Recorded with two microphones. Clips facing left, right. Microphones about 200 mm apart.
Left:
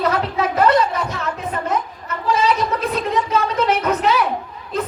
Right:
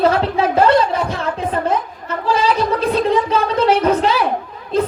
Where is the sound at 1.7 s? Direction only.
30° right (ahead or behind).